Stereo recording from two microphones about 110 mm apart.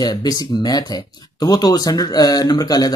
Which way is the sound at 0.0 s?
35° left (ahead or behind).